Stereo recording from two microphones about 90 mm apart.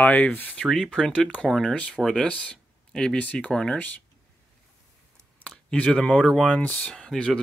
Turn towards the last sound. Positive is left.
turn(degrees=10)  # may be behind; listen again after turning